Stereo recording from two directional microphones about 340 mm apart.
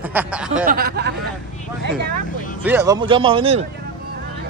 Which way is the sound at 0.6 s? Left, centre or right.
Right.